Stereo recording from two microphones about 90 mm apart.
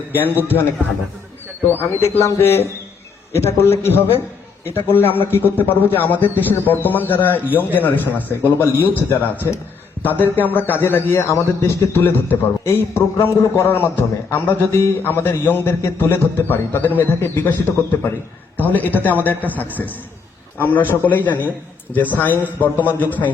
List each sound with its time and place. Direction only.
0.1 s a man's voice: 20° left (ahead or behind)